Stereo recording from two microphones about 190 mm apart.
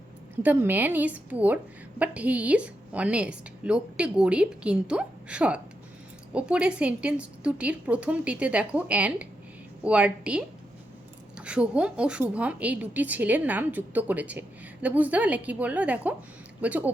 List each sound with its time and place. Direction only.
0.4 s a woman's voice: 10° right (ahead or behind)